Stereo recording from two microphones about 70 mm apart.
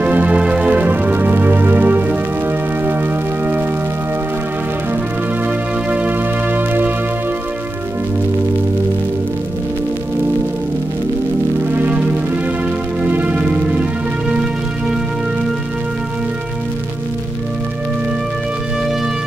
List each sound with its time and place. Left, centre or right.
0.0 s organ: right
5.9 s music: right
11.7 s music: right